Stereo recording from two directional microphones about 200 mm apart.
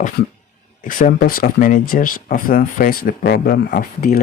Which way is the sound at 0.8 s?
40° left (ahead or behind).